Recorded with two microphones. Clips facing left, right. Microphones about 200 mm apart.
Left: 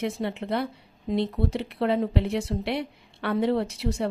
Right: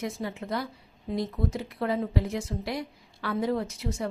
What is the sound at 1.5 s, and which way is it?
Speech, 70° left (ahead or behind).